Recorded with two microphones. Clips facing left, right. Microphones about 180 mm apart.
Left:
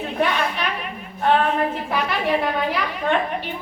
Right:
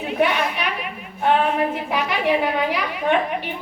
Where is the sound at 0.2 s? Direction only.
10° right (ahead or behind).